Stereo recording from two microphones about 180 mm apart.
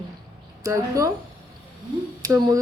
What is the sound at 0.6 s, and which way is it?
Speech, 15° right (ahead or behind).